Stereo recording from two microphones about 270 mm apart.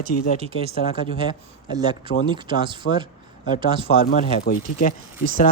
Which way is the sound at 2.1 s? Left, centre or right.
Left.